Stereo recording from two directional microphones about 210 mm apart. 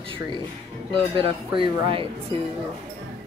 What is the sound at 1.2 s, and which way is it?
Speech, 25° right (ahead or behind).